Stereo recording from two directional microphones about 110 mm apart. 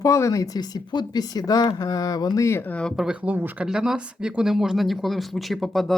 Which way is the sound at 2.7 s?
10° left (ahead or behind).